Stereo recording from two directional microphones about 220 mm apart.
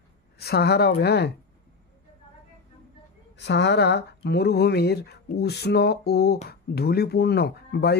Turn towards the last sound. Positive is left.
turn(degrees=45)  # may be behind; listen again after turning